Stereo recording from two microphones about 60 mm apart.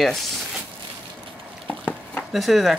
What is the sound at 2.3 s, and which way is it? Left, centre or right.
Speech, centre.